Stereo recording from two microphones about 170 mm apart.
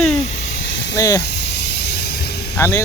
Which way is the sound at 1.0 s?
20° left (ahead or behind).